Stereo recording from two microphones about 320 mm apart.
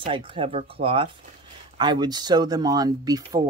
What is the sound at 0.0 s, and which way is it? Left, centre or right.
Speech, centre.